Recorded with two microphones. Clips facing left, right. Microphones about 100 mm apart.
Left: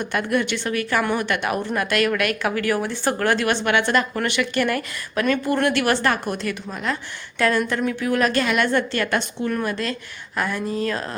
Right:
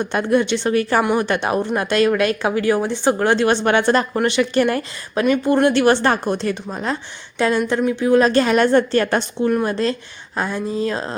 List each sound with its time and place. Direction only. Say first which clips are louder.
0.0 s speech: right 5 dB; 25° right (ahead or behind)